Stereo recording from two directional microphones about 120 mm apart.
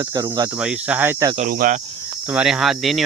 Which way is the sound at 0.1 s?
30° right (ahead or behind).